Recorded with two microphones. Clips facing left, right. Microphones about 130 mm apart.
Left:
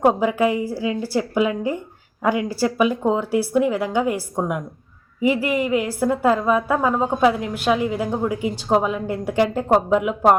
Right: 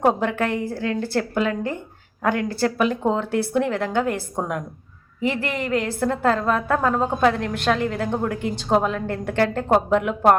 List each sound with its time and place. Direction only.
0.0 s a woman's voice: 5° left (ahead or behind)